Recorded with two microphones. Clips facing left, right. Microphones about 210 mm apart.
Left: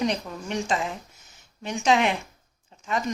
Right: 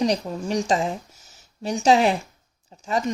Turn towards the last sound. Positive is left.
turn(degrees=-35)  # may be behind; listen again after turning